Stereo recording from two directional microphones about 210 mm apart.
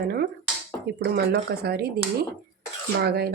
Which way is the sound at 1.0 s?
50° right (ahead or behind).